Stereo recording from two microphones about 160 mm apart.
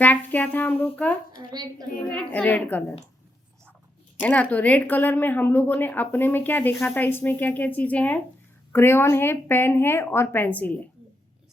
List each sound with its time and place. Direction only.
0.0 s speech: 10° left (ahead or behind)
1.4 s a woman's voice: 25° right (ahead or behind)
2.0 s speech: 5° left (ahead or behind)
4.2 s speech: 10° left (ahead or behind)